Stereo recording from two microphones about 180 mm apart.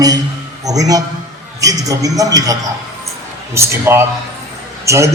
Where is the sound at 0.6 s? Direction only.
20° right (ahead or behind).